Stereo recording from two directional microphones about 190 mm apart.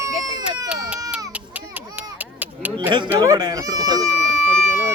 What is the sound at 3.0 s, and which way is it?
Speech, 20° right (ahead or behind).